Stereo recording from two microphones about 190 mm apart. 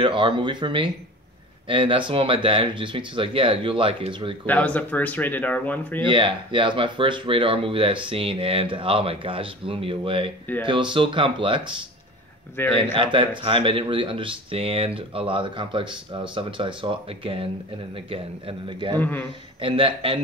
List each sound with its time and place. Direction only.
0.0 s speech: 25° right (ahead or behind)
4.5 s speech: 10° left (ahead or behind)
6.0 s speech: 25° right (ahead or behind)
12.6 s speech: 10° left (ahead or behind)
12.9 s speech: 25° right (ahead or behind)
18.7 s speech: 25° right (ahead or behind)
18.9 s speech: 10° left (ahead or behind)
19.6 s speech: 30° right (ahead or behind)